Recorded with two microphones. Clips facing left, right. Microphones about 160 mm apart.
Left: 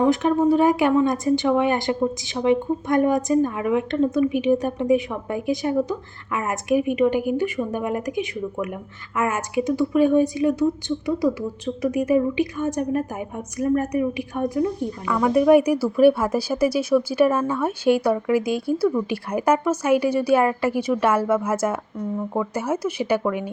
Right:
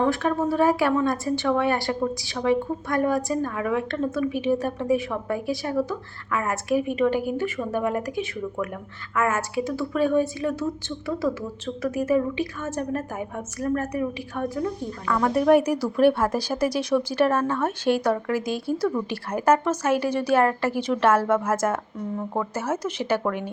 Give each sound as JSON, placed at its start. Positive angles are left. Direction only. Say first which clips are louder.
{"t": 0.0, "sound": "a woman's voice", "louder": "left 5 dB", "side_deg": 20}